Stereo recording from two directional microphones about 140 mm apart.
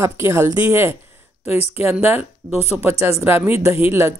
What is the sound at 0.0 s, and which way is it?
Speech, 20° right (ahead or behind).